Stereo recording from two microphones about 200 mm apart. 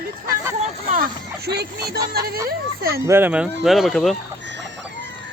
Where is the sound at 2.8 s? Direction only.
50° right (ahead or behind).